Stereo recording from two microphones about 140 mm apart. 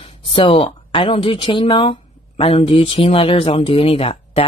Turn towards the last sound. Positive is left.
turn(degrees=45)  # may be behind; listen again after turning